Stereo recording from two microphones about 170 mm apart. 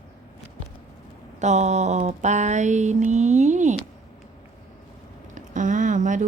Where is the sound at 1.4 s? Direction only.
40° right (ahead or behind).